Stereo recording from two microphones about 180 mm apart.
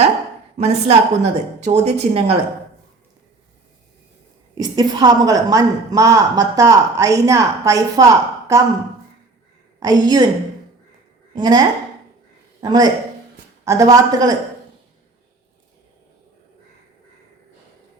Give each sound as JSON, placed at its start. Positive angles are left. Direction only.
{"t": 0.5, "sound": "a woman's voice", "side_deg": -35}
{"t": 4.5, "sound": "a woman's voice", "side_deg": -25}
{"t": 9.8, "sound": "a woman's voice", "side_deg": -20}
{"t": 11.3, "sound": "a woman's voice", "side_deg": -20}
{"t": 12.6, "sound": "a woman's voice", "side_deg": -20}